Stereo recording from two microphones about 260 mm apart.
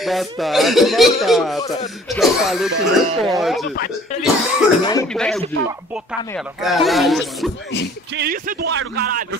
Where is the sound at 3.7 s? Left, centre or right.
Left.